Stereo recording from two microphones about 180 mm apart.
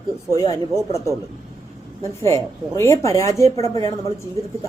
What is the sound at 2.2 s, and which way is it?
A woman's voice, 15° left (ahead or behind).